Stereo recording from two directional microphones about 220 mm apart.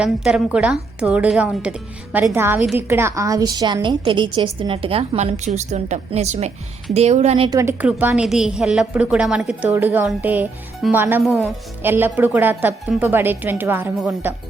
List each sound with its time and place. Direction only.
0.0 s a woman's voice: 5° right (ahead or behind)